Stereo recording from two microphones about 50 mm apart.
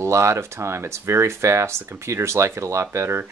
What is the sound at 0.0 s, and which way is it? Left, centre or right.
Speech, right.